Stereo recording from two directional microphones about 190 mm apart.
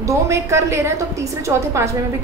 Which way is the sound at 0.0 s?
15° right (ahead or behind).